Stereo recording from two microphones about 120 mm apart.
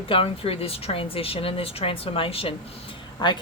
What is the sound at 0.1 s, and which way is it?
A woman's voice, 50° left (ahead or behind).